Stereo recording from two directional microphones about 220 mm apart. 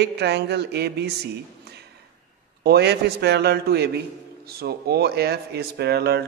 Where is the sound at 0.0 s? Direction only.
50° right (ahead or behind).